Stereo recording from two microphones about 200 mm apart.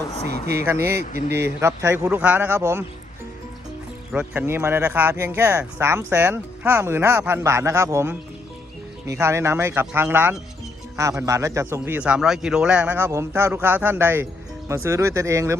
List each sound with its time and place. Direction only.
0.3 s speech: 55° right (ahead or behind)
0.6 s speech: 10° right (ahead or behind)
0.9 s speech: 55° right (ahead or behind)
1.5 s speech: 15° right (ahead or behind)
4.1 s speech: 10° right (ahead or behind)